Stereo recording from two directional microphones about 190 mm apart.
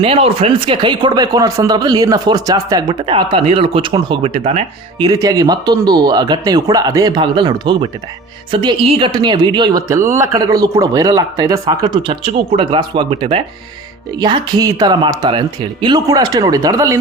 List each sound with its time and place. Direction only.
0.0 s speech: 30° right (ahead or behind)
5.0 s speech: 20° right (ahead or behind)